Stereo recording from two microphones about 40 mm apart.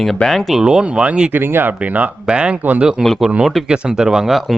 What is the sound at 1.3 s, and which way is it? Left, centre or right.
Speech, right.